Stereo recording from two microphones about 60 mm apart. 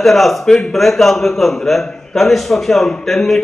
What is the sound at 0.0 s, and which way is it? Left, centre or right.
A man's voice, centre.